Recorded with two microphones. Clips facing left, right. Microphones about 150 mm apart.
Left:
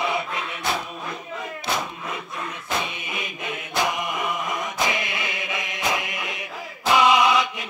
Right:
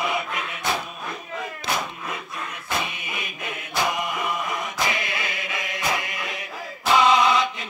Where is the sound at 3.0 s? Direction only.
20° left (ahead or behind).